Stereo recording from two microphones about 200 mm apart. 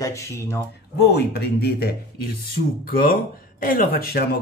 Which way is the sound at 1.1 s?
55° left (ahead or behind).